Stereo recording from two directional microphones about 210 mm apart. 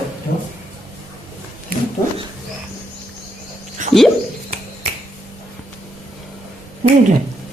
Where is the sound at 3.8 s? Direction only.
35° right (ahead or behind).